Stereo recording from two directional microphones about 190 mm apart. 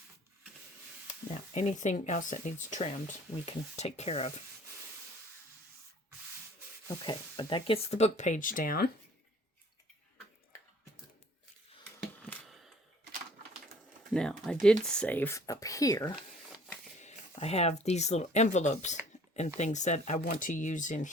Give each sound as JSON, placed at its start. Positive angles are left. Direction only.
{"t": 1.3, "sound": "speech", "side_deg": 35}
{"t": 6.8, "sound": "speech", "side_deg": 20}
{"t": 12.3, "sound": "a sound", "side_deg": 0}
{"t": 14.1, "sound": "speech", "side_deg": 5}
{"t": 16.1, "sound": "a sound", "side_deg": 0}
{"t": 17.0, "sound": "speech", "side_deg": 35}